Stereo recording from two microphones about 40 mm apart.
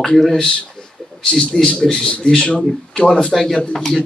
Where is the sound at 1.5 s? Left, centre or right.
Centre.